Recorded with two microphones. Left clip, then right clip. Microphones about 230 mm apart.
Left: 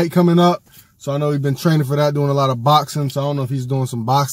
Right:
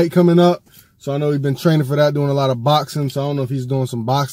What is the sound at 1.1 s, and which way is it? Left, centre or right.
Speech, left.